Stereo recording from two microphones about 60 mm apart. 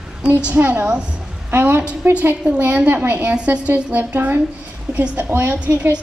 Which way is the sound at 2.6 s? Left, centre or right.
Right.